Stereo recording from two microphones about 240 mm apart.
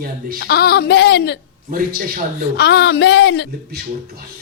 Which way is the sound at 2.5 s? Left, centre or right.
Left.